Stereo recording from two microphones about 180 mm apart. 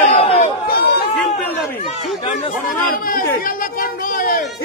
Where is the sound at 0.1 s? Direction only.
30° left (ahead or behind).